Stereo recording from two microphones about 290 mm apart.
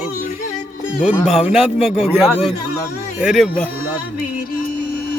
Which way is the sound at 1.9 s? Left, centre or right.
Centre.